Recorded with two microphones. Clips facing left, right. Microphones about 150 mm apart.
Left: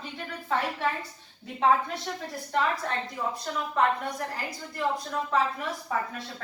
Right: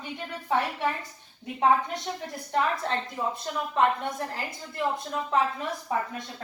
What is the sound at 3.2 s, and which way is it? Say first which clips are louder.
A woman's voice: right 1 dB; 25° right (ahead or behind).